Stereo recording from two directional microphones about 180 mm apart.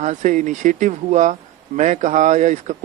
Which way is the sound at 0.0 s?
40° right (ahead or behind).